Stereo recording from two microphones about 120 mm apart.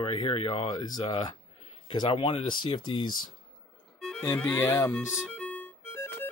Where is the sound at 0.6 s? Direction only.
35° left (ahead or behind).